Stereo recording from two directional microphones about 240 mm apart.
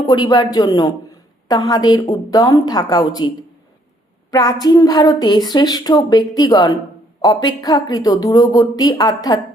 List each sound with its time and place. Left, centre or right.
0.0 s a woman's voice: centre